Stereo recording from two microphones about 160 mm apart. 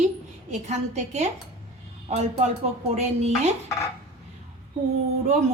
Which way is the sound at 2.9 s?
45° right (ahead or behind).